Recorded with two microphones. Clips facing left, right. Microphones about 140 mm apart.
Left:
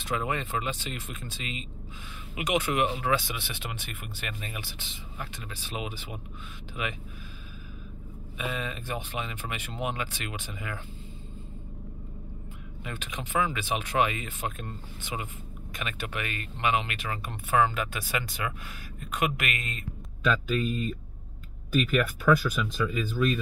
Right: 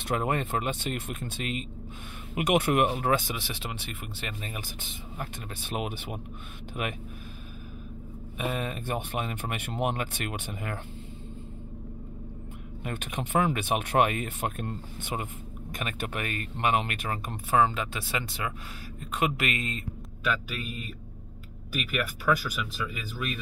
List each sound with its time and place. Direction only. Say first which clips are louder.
0.1 s speech: right 2 dB; 50° right (ahead or behind); by 4.5 s 30° right (ahead or behind)
4.6 s speech: right 1 dB; 45° right (ahead or behind)
8.4 s speech: right 2 dB; 50° right (ahead or behind)
12.8 s speech: right 4 dB; 55° right (ahead or behind); by 19.8 s 30° right (ahead or behind)
20.4 s speech: left 9 dB; 10° right (ahead or behind)